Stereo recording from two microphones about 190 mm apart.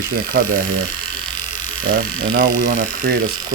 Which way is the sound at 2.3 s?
55° right (ahead or behind).